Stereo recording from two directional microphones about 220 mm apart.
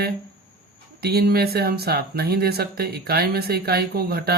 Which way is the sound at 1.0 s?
45° right (ahead or behind).